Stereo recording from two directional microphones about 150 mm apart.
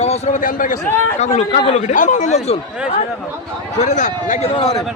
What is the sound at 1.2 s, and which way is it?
A man's voice, 50° left (ahead or behind).